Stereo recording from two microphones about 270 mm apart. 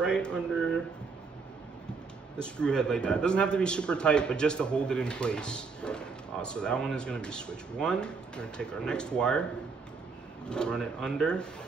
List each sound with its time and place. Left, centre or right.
0.0 s a sound: centre
2.4 s a man's voice: centre
10.5 s a man's voice: centre